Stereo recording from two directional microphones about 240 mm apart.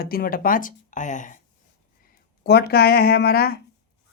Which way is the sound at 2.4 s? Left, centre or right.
Left.